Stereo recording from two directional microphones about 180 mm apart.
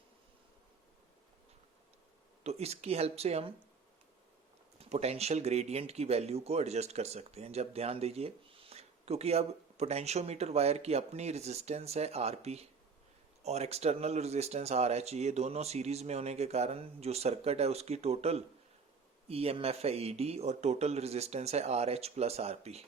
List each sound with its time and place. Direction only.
2.4 s speech: 35° right (ahead or behind)
4.8 s speech: 35° right (ahead or behind)